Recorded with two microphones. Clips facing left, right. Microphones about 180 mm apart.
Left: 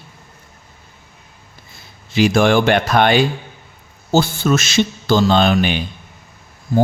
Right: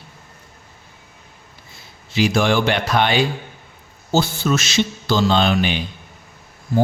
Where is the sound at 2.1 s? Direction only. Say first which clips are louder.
Left 4 dB; 50° left (ahead or behind).